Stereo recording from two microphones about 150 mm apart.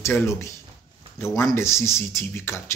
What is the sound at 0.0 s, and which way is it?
Speech, 15° left (ahead or behind).